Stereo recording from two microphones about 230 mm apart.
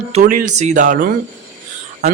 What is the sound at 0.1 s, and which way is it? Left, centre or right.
A man's voice, right.